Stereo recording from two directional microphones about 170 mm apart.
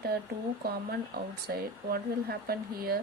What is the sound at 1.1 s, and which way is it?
Speech, 65° right (ahead or behind).